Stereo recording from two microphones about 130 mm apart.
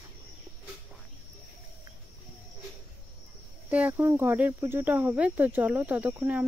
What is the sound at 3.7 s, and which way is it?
Speech, 15° right (ahead or behind).